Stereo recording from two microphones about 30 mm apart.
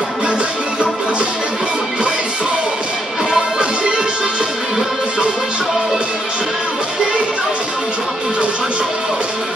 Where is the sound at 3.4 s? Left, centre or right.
Right.